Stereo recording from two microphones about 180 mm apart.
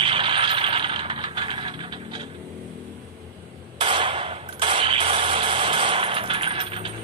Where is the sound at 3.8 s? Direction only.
30° right (ahead or behind).